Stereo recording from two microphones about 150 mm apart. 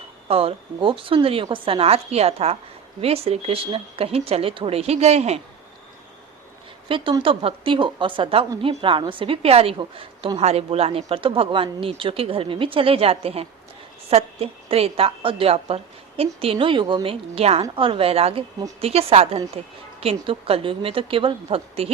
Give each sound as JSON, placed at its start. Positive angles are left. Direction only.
{"t": 0.3, "sound": "a woman's voice", "side_deg": -40}
{"t": 6.8, "sound": "a woman's voice", "side_deg": -35}